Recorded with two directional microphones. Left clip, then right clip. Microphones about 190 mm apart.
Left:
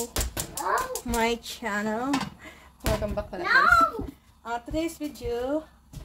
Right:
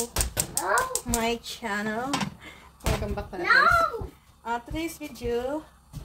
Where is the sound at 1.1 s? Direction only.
50° left (ahead or behind); by 2.5 s 35° left (ahead or behind).